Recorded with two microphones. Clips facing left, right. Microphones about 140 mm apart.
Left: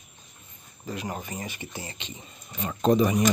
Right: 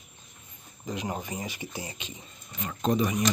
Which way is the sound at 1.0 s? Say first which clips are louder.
Right 1 dB; 10° right (ahead or behind).